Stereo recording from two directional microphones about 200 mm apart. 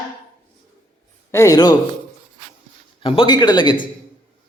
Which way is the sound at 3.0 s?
25° left (ahead or behind).